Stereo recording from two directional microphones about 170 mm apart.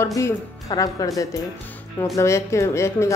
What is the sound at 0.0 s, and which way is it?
A woman's voice, 20° left (ahead or behind).